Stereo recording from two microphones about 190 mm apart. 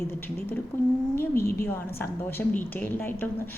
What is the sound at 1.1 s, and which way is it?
A woman's voice, 10° left (ahead or behind).